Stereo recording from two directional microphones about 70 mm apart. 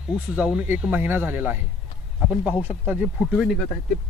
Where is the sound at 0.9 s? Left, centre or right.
Right.